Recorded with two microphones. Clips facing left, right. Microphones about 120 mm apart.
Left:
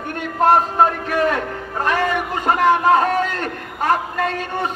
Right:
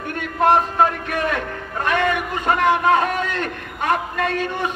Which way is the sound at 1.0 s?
30° left (ahead or behind).